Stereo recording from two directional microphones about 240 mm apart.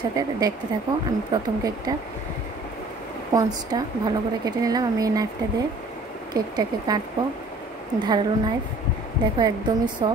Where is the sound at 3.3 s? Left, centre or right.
Centre.